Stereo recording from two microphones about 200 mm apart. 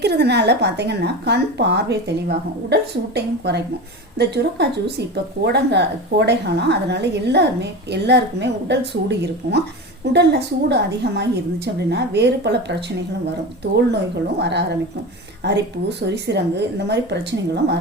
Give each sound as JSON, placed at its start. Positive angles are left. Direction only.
{"t": 0.0, "sound": "speech", "side_deg": -55}
{"t": 13.7, "sound": "speech", "side_deg": -55}